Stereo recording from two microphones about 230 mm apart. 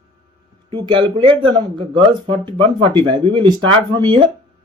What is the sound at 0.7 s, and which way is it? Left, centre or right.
Speech, centre.